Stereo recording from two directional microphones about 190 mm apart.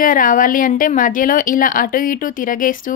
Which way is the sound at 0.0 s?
45° left (ahead or behind).